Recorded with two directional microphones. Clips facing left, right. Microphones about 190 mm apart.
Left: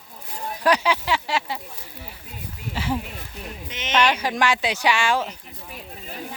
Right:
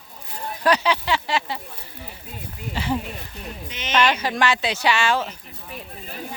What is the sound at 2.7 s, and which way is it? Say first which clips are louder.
Speech: right 1 dB; 5° left (ahead or behind).